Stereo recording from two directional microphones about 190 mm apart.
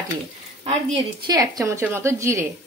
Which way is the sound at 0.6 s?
25° right (ahead or behind).